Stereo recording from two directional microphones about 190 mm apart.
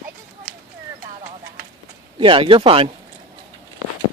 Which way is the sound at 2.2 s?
25° right (ahead or behind).